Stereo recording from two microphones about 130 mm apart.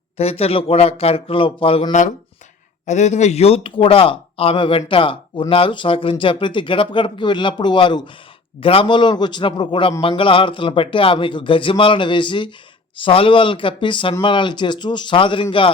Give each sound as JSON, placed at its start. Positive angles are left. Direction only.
{"t": 0.2, "sound": "speech", "side_deg": 50}
{"t": 1.9, "sound": "speech", "side_deg": 70}